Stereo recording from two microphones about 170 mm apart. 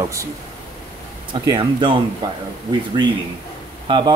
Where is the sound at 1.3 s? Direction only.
30° right (ahead or behind).